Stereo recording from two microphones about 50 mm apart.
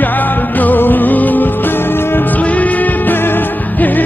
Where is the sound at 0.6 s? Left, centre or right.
Left.